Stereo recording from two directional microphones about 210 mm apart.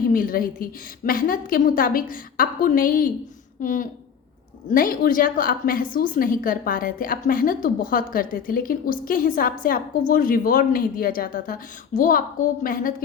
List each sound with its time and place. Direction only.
0.0 s a woman's voice: 40° left (ahead or behind)